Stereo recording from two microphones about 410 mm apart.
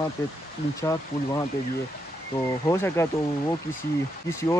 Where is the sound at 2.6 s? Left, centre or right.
Centre.